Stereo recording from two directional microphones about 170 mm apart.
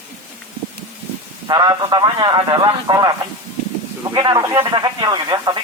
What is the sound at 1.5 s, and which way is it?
A man's voice, 25° right (ahead or behind).